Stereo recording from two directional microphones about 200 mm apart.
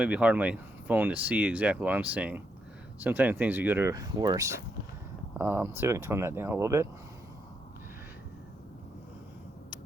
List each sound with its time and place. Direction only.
0.0 s speech: 5° right (ahead or behind)